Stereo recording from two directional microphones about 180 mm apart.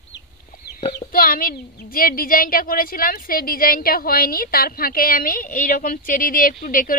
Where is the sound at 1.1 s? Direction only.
55° left (ahead or behind).